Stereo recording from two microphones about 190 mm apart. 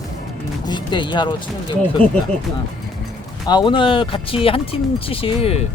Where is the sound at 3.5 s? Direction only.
25° left (ahead or behind).